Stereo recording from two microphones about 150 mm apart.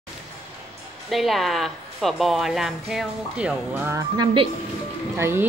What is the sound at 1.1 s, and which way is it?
A woman's voice, centre (ahead or behind).